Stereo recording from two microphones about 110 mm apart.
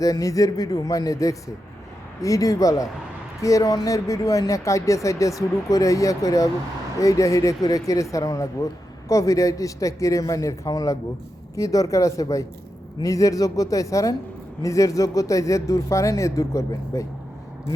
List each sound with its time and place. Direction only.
0.0 s speech: 30° left (ahead or behind)